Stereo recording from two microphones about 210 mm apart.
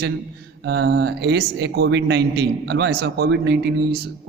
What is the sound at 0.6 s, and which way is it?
Speech, 50° right (ahead or behind).